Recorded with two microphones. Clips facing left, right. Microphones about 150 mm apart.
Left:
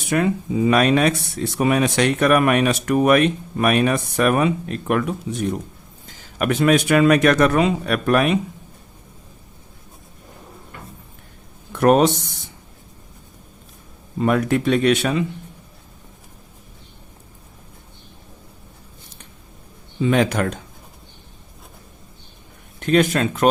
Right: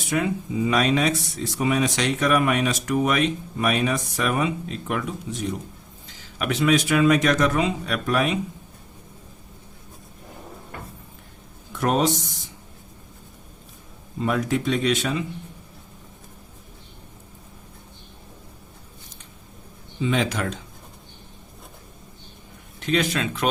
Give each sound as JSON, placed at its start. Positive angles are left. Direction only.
{"t": 0.0, "sound": "speech", "side_deg": 60}
{"t": 11.7, "sound": "speech", "side_deg": 60}
{"t": 14.2, "sound": "speech", "side_deg": 60}
{"t": 20.0, "sound": "speech", "side_deg": 55}
{"t": 22.8, "sound": "speech", "side_deg": 50}